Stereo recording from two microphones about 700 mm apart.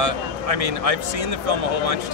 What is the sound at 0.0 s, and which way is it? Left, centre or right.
Speech, right.